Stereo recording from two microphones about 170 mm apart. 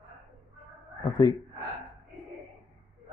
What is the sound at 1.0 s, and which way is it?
Speech, 25° left (ahead or behind).